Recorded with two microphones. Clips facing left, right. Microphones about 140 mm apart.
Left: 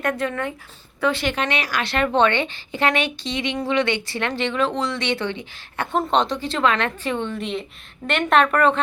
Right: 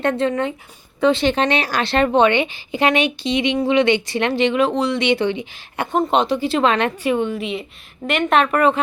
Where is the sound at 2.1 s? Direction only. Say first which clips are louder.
Right 2 dB; 10° right (ahead or behind).